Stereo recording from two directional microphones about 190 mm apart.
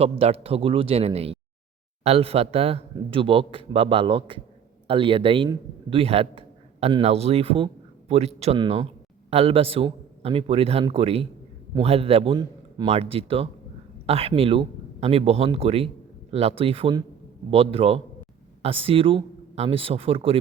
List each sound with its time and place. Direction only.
0.0 s a man's voice: 30° right (ahead or behind)